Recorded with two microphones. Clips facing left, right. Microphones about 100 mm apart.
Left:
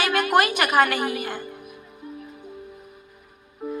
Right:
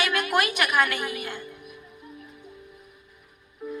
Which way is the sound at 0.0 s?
40° left (ahead or behind).